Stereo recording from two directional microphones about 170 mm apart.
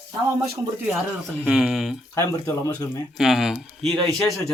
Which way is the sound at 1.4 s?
5° right (ahead or behind).